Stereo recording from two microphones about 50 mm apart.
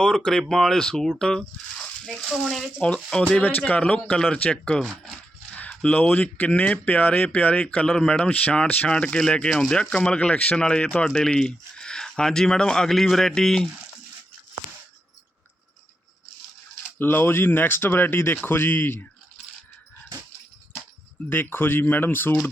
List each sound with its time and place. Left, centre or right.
0.0 s speech: centre
2.3 s speech: centre
2.8 s speech: left
5.5 s speech: left
7.9 s speech: centre
8.3 s speech: left
8.9 s speech: left
12.9 s speech: centre
17.0 s speech: left
21.2 s speech: left